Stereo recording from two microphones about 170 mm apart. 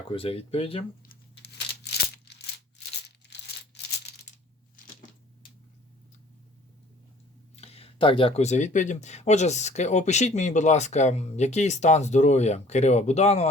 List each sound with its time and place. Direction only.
0.1 s speech: 35° left (ahead or behind)
1.0 s tearing: 70° left (ahead or behind)
7.5 s speech: 35° left (ahead or behind)